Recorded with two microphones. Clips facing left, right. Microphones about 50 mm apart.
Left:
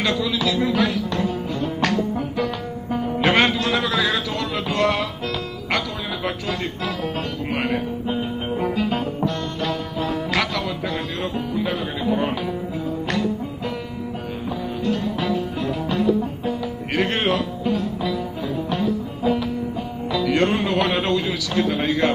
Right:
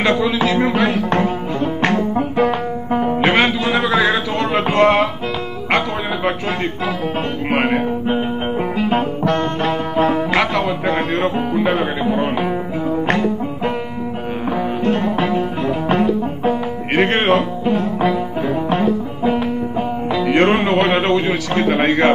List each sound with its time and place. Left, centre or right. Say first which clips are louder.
0.0 s music: right 6 dB; right
3.3 s music: right 3 dB; centre
3.7 s a sound: right 5 dB; right
4.0 s music: right 6 dB; right
5.7 s speech: right 7 dB; right
7.5 s music: right 7 dB; right
9.3 s music: right 7 dB; right
14.9 s music: right 4 dB; right